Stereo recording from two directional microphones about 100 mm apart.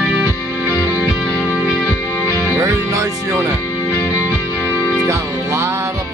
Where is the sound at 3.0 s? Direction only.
35° right (ahead or behind).